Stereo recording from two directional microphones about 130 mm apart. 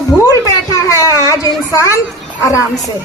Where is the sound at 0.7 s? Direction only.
25° left (ahead or behind).